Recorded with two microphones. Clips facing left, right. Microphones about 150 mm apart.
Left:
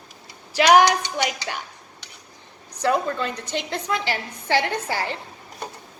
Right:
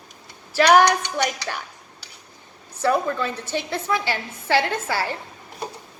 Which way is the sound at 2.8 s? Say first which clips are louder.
Right 1 dB; 20° left (ahead or behind).